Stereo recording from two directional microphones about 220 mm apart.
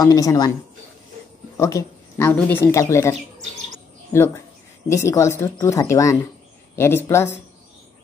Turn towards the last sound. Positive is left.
turn(degrees=10)  # may be behind; listen again after turning